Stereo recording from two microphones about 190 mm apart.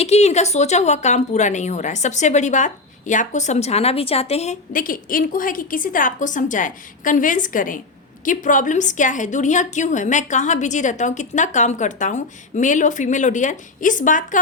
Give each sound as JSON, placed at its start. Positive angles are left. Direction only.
{"t": 0.0, "sound": "speech", "side_deg": 35}